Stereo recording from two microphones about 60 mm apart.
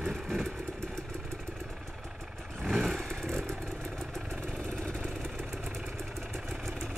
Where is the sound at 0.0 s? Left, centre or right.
Centre.